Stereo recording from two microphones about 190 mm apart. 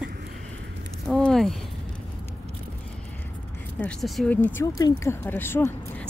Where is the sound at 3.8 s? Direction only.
5° left (ahead or behind).